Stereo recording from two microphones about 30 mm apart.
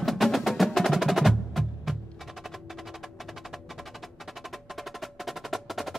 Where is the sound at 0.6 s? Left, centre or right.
Centre.